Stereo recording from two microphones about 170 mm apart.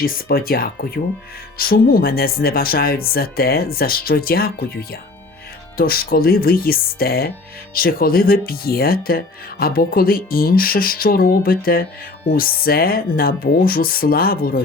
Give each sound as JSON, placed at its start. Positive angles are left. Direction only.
{"t": 0.0, "sound": "speech", "side_deg": 60}